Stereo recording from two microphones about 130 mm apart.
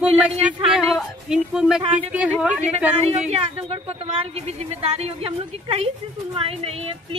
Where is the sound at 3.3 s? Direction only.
50° right (ahead or behind).